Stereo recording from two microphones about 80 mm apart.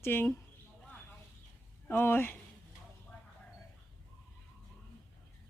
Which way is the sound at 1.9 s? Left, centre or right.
Left.